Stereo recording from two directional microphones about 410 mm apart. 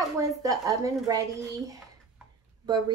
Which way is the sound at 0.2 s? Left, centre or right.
Centre.